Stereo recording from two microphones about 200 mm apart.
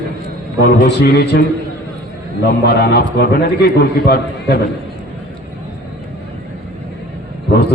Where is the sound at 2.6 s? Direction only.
55° left (ahead or behind).